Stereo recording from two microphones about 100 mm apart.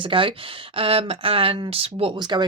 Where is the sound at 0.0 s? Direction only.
60° right (ahead or behind).